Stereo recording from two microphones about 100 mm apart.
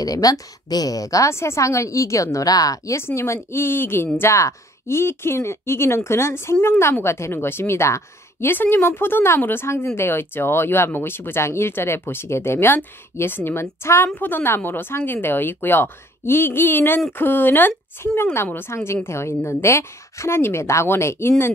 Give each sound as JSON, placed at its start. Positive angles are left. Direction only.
{"t": 0.0, "sound": "a woman's voice", "side_deg": 35}
{"t": 3.0, "sound": "speech", "side_deg": 25}